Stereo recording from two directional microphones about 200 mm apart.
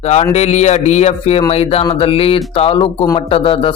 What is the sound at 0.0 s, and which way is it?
Speech, 35° left (ahead or behind).